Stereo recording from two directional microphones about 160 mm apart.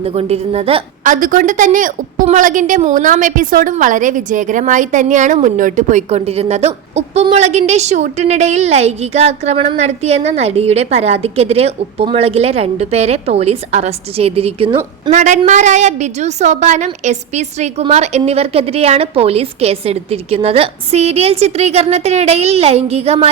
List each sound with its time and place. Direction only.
0.0 s a woman's voice: 40° right (ahead or behind)
1.0 s a woman's voice: 55° right (ahead or behind); by 14.8 s 35° right (ahead or behind)
15.1 s a woman's voice: 45° right (ahead or behind)